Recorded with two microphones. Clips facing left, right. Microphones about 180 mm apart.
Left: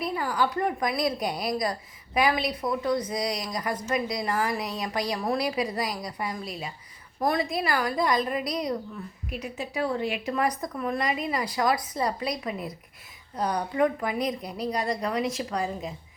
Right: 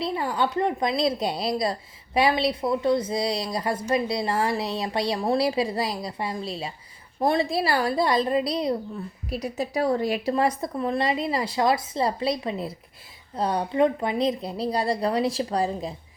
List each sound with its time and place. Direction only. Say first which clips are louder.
0.0 s a woman's voice: right 2 dB; 25° right (ahead or behind)
9.3 s a woman's voice: right 5 dB; 40° right (ahead or behind)